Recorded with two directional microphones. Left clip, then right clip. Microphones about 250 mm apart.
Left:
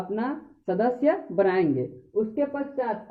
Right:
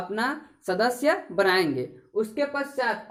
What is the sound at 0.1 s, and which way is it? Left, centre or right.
Speech, centre.